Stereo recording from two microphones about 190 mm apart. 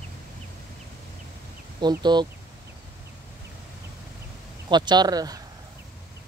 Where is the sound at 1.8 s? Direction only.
20° right (ahead or behind).